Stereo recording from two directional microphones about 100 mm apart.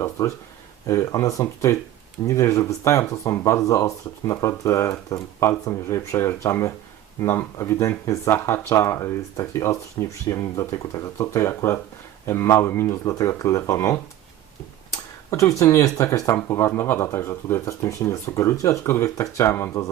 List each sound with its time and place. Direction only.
0.2 s speech: 35° left (ahead or behind)
15.3 s speech: 30° left (ahead or behind)